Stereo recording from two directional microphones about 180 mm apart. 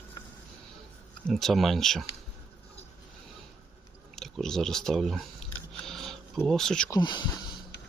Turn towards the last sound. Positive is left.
turn(degrees=25)  # may be behind; listen again after turning